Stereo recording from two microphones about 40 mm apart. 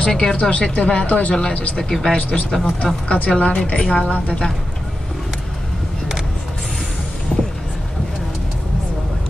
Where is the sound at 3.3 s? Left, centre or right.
Left.